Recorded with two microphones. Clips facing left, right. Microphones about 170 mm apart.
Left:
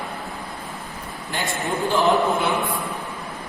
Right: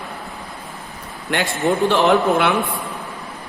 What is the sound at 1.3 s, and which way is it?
A man's voice, 75° right (ahead or behind).